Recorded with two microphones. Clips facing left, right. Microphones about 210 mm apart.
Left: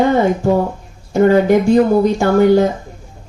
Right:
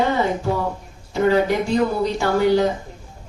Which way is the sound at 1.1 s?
50° left (ahead or behind).